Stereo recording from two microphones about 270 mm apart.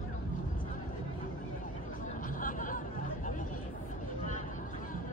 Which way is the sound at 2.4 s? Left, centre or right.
Left.